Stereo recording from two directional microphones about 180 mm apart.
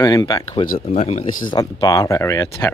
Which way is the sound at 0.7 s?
40° left (ahead or behind).